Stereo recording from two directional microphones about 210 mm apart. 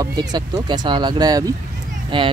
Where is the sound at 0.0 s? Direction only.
20° right (ahead or behind).